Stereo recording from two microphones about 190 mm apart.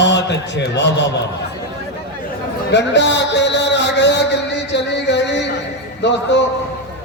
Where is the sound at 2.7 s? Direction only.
65° left (ahead or behind).